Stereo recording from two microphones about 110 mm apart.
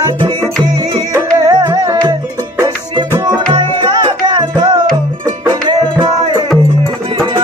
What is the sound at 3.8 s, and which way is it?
Music, 40° right (ahead or behind).